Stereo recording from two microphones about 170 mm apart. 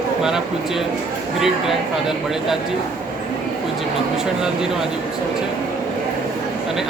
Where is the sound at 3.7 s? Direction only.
5° right (ahead or behind).